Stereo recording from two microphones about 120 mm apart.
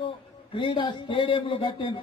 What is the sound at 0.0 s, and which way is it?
A man's voice, 50° left (ahead or behind).